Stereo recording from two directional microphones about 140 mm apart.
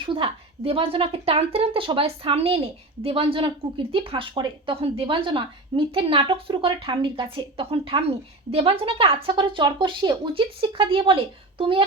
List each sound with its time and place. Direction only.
0.0 s a woman's voice: 35° right (ahead or behind)